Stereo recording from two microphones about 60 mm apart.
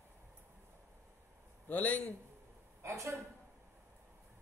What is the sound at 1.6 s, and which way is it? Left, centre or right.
Speech, left.